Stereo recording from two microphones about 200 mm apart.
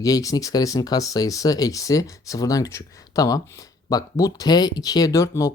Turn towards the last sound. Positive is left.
turn(degrees=15)  # may be behind; listen again after turning